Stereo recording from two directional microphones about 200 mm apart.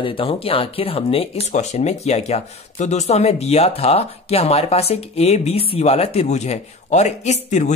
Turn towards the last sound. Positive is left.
turn(degrees=35)  # may be behind; listen again after turning